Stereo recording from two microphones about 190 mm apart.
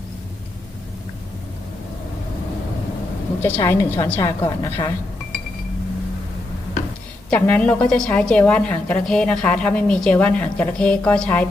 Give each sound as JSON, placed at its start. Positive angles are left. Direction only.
{"t": 3.4, "sound": "a woman's voice", "side_deg": 10}
{"t": 7.3, "sound": "a woman's voice", "side_deg": 10}